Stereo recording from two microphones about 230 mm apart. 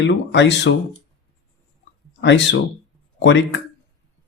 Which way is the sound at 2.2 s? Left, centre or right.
Left.